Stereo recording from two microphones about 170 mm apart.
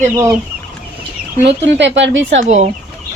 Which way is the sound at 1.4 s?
90° right.